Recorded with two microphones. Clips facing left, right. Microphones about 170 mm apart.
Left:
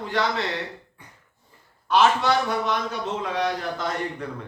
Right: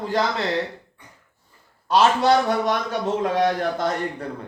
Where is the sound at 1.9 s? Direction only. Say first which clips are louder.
Right 2 dB; 35° right (ahead or behind).